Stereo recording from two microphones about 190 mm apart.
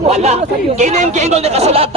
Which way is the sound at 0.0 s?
35° right (ahead or behind).